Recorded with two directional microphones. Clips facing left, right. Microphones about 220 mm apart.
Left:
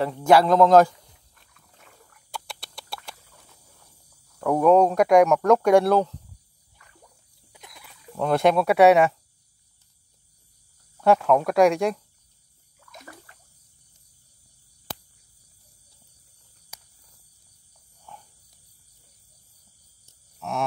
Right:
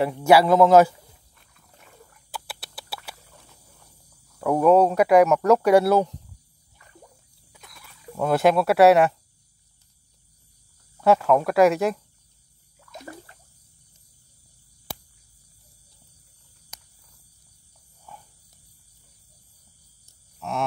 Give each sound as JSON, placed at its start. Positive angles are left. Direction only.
{"t": 0.0, "sound": "speech", "side_deg": -10}
{"t": 2.3, "sound": "rodents", "side_deg": -5}
{"t": 4.4, "sound": "speech", "side_deg": -5}
{"t": 7.5, "sound": "music", "side_deg": 20}
{"t": 8.1, "sound": "speech", "side_deg": -5}
{"t": 11.0, "sound": "speech", "side_deg": 0}
{"t": 12.9, "sound": "a sound", "side_deg": -30}
{"t": 14.9, "sound": "cricket", "side_deg": -10}
{"t": 16.7, "sound": "cricket", "side_deg": 10}
{"t": 18.1, "sound": "snake", "side_deg": -5}
{"t": 20.3, "sound": "a sound", "side_deg": 0}